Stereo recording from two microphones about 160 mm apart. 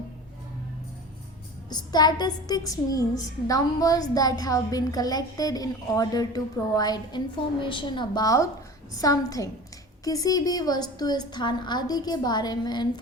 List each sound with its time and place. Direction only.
1.7 s a woman's voice: 25° left (ahead or behind)